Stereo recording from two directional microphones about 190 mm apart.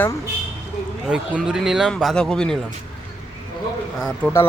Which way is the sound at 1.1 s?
5° right (ahead or behind).